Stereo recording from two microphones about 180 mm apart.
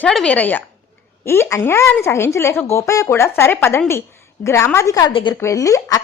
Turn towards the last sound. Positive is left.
turn(degrees=20)  # may be behind; listen again after turning